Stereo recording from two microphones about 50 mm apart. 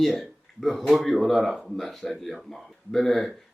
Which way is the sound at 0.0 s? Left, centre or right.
Centre.